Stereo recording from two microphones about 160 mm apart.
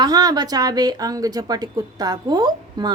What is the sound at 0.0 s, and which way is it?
A woman's voice, 25° right (ahead or behind).